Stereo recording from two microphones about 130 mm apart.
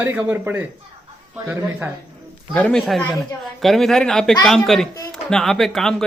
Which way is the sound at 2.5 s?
5° left (ahead or behind).